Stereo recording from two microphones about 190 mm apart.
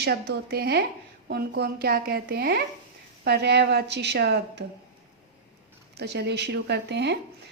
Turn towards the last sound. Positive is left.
turn(degrees=-60)  # may be behind; listen again after turning